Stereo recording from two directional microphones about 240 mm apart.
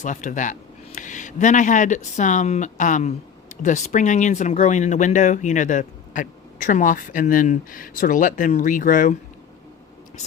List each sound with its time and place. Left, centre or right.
0.0 s speech: left